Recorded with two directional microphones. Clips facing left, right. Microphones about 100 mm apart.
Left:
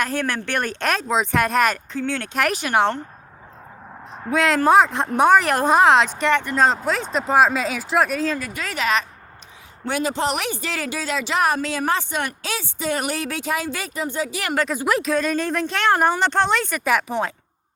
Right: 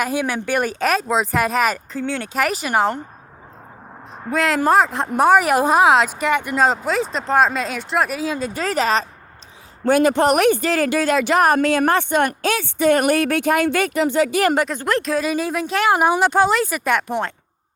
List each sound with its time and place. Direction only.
0.0 s a woman's voice: 10° right (ahead or behind)
4.2 s a woman's voice: centre (ahead or behind)
8.4 s a woman's voice: 30° right (ahead or behind)
9.8 s speech: 55° right (ahead or behind); by 14.3 s 75° right (ahead or behind)
14.7 s a woman's voice: 5° left (ahead or behind)